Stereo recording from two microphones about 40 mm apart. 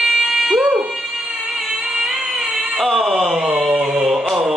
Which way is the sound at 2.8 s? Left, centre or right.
Centre.